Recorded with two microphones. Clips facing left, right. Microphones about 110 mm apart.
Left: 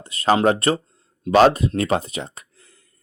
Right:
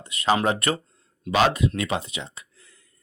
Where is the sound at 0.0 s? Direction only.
35° left (ahead or behind).